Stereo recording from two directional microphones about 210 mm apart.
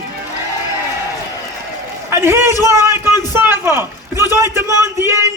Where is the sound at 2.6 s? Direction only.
10° right (ahead or behind).